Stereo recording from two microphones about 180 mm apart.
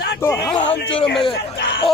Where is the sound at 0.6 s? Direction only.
90° left.